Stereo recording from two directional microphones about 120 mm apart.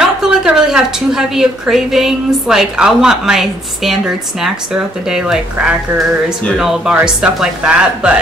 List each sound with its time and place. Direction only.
0.0 s a woman's voice: 5° right (ahead or behind)